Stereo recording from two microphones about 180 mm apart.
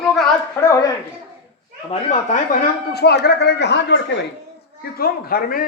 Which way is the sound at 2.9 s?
65° left (ahead or behind).